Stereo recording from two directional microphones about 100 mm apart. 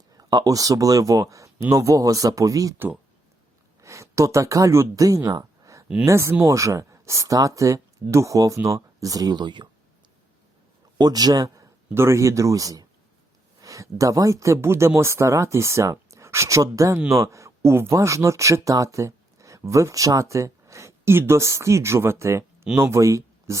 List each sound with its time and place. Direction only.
0.2 s speech: 40° right (ahead or behind)
2.7 s speech: 20° right (ahead or behind)
3.8 s speech: 30° right (ahead or behind)
5.3 s a sound: 35° right (ahead or behind)
6.1 s speech: 30° right (ahead or behind); by 9.6 s 50° right (ahead or behind)
10.9 s a man's voice: 40° right (ahead or behind)